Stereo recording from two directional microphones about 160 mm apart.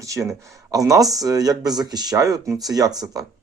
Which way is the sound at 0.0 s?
20° right (ahead or behind).